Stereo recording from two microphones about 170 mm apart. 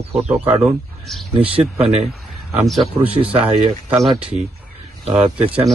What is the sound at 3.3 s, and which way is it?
Speech, 35° right (ahead or behind).